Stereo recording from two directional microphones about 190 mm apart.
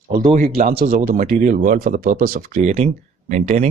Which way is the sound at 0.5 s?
30° right (ahead or behind).